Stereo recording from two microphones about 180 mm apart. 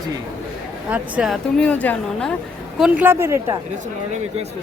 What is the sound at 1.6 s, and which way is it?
Speech, 10° left (ahead or behind).